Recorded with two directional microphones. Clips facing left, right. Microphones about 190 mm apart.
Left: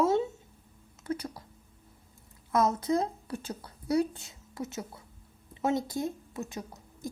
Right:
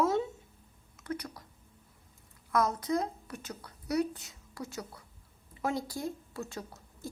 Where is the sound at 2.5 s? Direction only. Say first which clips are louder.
Left 3 dB; 25° left (ahead or behind).